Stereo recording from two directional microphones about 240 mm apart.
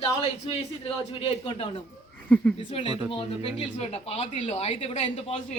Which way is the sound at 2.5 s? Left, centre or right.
Left.